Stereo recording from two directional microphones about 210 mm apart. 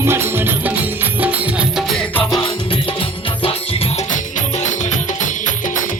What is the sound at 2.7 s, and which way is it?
Music, 25° left (ahead or behind).